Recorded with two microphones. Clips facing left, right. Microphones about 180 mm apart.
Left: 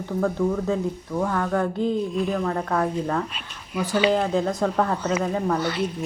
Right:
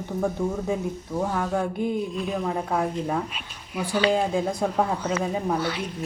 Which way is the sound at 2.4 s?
10° right (ahead or behind).